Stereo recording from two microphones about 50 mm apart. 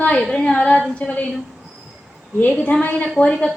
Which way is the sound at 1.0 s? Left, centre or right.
Left.